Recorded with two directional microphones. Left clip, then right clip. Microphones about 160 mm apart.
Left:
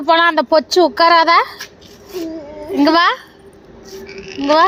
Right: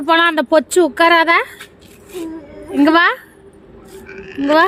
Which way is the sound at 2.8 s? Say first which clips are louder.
Even; 30° right (ahead or behind).